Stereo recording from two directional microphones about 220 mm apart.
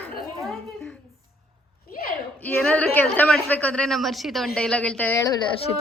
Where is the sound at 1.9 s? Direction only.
40° left (ahead or behind).